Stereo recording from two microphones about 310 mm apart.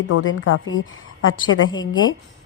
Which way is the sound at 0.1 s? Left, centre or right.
Left.